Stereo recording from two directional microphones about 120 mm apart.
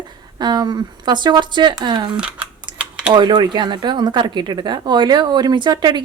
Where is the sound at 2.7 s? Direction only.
40° right (ahead or behind).